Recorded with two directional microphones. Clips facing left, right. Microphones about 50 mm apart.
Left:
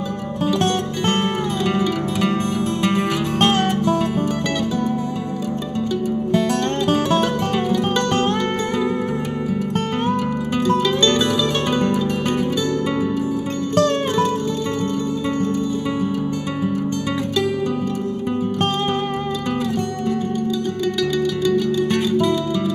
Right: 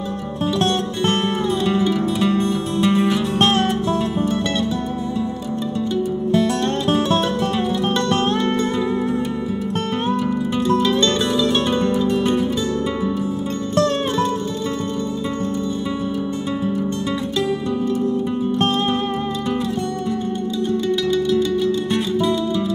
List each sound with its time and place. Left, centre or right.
2.2 s music: left
10.0 s music: left